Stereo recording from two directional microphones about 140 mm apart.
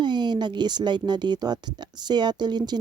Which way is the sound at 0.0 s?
30° right (ahead or behind).